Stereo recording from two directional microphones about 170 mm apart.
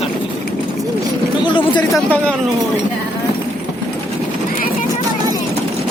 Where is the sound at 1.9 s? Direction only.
5° left (ahead or behind).